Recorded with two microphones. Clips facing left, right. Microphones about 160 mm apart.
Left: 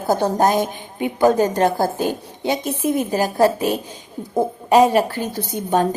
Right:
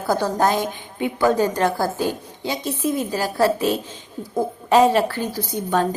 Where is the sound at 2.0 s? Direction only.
15° left (ahead or behind).